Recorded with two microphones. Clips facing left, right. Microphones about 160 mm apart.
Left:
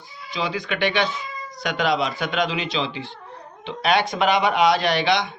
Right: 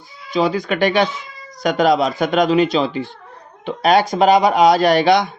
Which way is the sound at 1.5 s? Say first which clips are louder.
Right 7 dB; 45° right (ahead or behind).